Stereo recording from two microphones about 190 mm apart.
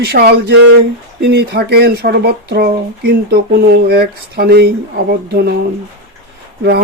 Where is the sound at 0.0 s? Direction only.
55° right (ahead or behind).